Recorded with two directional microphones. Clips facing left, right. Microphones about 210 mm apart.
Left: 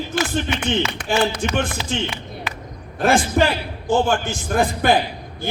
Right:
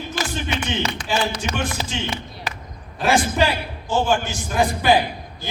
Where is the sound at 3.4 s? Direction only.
50° left (ahead or behind).